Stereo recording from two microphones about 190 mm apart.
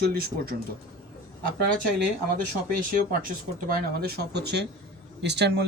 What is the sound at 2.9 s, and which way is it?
Speech, 50° right (ahead or behind).